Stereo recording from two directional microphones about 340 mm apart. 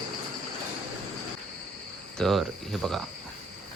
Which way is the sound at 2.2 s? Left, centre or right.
Centre.